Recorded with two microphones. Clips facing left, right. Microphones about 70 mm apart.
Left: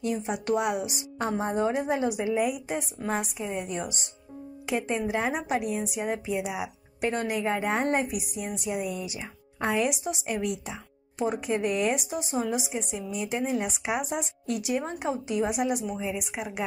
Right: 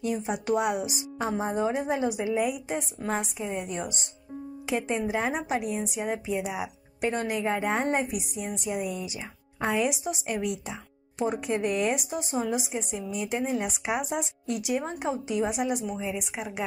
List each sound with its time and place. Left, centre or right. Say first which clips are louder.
0.0 s a woman's voice: even; centre